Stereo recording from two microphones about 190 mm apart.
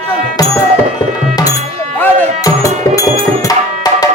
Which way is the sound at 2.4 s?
20° left (ahead or behind).